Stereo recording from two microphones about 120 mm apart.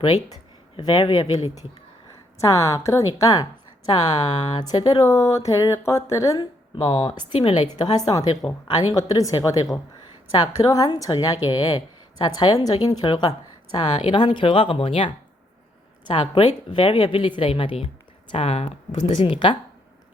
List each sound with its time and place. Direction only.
0.8 s a woman's voice: 35° left (ahead or behind)
2.4 s speech: 25° left (ahead or behind)
6.4 s a woman's voice: 40° left (ahead or behind); by 18.7 s 60° left (ahead or behind)
19.0 s speech: 50° left (ahead or behind)